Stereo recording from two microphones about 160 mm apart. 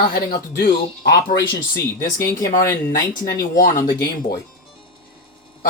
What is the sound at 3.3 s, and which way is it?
Speech, 60° left (ahead or behind).